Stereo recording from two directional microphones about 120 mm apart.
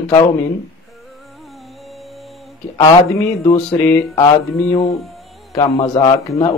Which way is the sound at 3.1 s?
25° left (ahead or behind).